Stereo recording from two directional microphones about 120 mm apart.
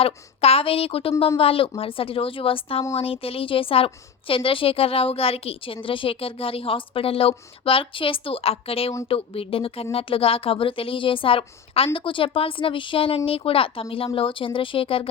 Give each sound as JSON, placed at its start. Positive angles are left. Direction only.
{"t": 0.0, "sound": "a woman's voice", "side_deg": 55}